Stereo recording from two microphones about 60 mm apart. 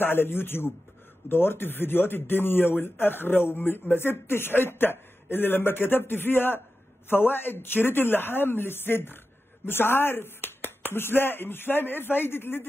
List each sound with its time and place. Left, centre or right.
0.0 s speech: left